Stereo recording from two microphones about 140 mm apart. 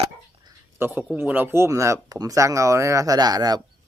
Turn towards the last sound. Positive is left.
turn(degrees=-30)  # may be behind; listen again after turning